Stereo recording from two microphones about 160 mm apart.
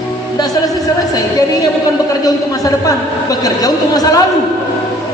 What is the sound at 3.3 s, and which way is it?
Speech, 25° left (ahead or behind).